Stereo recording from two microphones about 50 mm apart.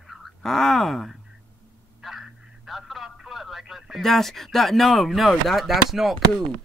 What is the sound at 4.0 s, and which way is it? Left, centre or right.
Speech, centre.